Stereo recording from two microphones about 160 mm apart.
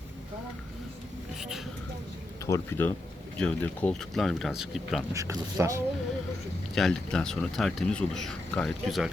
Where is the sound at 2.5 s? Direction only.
15° left (ahead or behind); by 5.0 s centre (ahead or behind).